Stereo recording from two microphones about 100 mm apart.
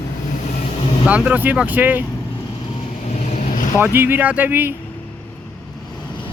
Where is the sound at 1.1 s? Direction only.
15° right (ahead or behind).